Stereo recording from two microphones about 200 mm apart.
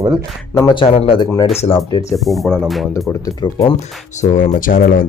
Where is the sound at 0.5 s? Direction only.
20° left (ahead or behind).